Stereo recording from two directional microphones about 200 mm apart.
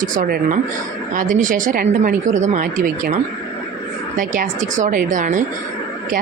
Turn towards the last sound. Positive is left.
turn(degrees=-40)  # may be behind; listen again after turning